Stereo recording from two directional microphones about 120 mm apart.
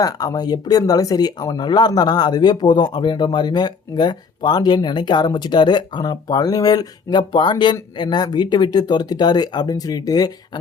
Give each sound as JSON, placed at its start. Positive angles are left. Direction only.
{"t": 0.0, "sound": "speech", "side_deg": 35}